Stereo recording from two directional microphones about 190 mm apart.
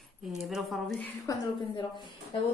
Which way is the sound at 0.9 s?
15° left (ahead or behind).